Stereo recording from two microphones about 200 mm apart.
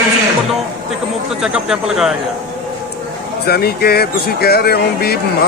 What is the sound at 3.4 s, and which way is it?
Speech, 50° left (ahead or behind).